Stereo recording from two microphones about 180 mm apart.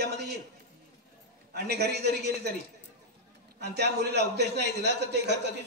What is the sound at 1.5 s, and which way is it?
A woman's voice, 65° right (ahead or behind).